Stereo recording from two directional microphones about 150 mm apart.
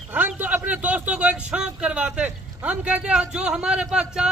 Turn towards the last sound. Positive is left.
turn(degrees=-5)  # may be behind; listen again after turning